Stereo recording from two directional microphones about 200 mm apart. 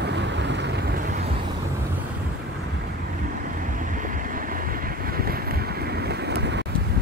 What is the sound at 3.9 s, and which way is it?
Boat, 40° right (ahead or behind).